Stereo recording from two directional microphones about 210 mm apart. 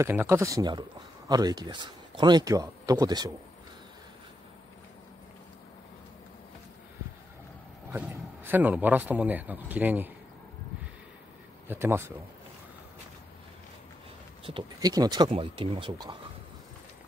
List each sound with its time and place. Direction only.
0.0 s speech: 10° right (ahead or behind)
7.9 s speech: 10° right (ahead or behind)
11.6 s speech: 10° right (ahead or behind)
14.4 s speech: 20° right (ahead or behind)